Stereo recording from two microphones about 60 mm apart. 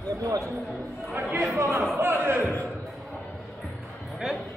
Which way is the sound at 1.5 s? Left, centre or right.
Right.